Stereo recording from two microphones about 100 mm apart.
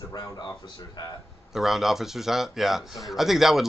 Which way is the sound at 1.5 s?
5° right (ahead or behind).